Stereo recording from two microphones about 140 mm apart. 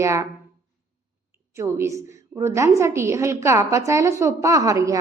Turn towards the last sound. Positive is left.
turn(degrees=-25)  # may be behind; listen again after turning